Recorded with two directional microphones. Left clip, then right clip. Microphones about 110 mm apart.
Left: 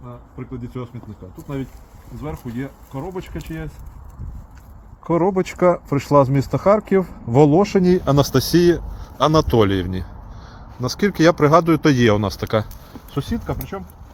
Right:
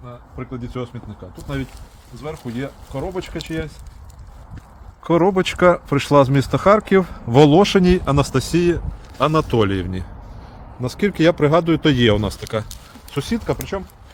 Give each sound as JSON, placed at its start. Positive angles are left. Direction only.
{"t": 0.3, "sound": "speech", "side_deg": -50}
{"t": 2.2, "sound": "speech", "side_deg": -45}
{"t": 5.0, "sound": "speech", "side_deg": -45}
{"t": 8.0, "sound": "a man's voice", "side_deg": 20}
{"t": 10.8, "sound": "speech", "side_deg": 10}
{"t": 13.1, "sound": "speech", "side_deg": -35}
{"t": 13.7, "sound": "speech", "side_deg": -70}